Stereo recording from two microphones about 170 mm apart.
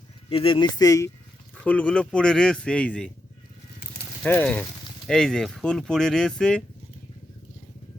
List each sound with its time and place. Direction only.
0.3 s speech: 30° left (ahead or behind)
1.5 s speech: 5° left (ahead or behind)
4.2 s speech: 5° left (ahead or behind)